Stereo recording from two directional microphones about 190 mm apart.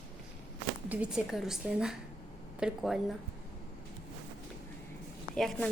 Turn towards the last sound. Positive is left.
turn(degrees=0)  # may be behind; listen again after turning